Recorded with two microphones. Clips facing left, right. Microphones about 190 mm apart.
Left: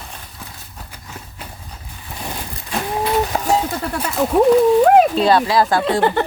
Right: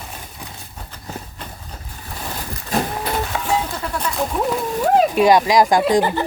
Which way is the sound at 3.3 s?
40° left (ahead or behind).